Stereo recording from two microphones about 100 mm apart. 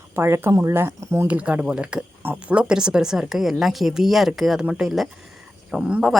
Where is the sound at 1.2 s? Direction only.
15° right (ahead or behind).